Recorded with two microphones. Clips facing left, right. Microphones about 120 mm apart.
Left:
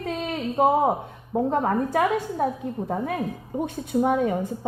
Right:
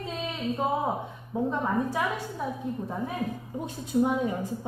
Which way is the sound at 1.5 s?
65° left (ahead or behind).